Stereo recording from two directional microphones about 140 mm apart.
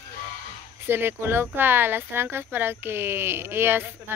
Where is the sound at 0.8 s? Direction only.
15° right (ahead or behind).